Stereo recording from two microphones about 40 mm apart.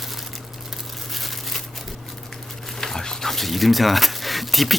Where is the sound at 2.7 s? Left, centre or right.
Centre.